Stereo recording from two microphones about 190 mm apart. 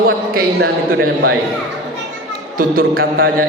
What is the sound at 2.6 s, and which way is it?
Speech, 50° right (ahead or behind).